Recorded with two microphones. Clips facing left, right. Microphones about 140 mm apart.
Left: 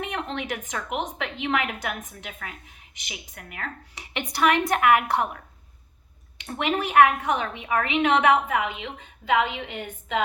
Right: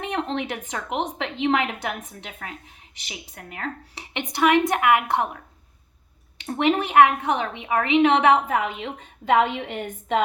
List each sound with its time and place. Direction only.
0.0 s a woman's voice: 30° right (ahead or behind)
6.4 s a woman's voice: 25° right (ahead or behind)